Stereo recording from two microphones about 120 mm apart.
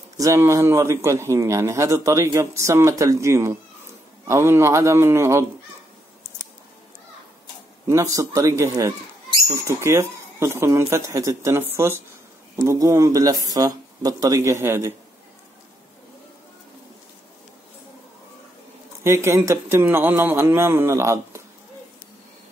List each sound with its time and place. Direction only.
0.2 s a man's voice: 25° right (ahead or behind)
7.9 s a man's voice: 25° right (ahead or behind)
19.0 s a man's voice: 25° right (ahead or behind)